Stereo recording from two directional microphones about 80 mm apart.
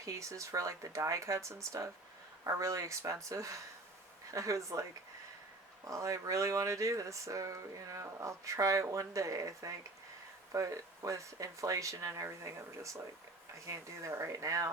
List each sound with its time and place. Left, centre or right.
0.0 s speech: right
5.9 s speech: right